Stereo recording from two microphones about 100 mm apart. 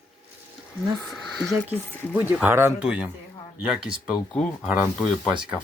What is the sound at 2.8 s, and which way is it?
Speech, 10° right (ahead or behind).